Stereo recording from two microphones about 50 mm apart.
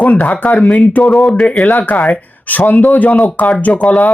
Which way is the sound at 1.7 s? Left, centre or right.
Left.